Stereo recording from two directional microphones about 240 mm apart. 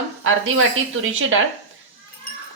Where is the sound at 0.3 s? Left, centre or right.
Right.